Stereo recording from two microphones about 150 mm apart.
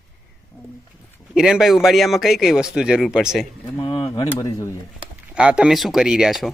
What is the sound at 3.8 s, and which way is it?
Speech, 35° left (ahead or behind).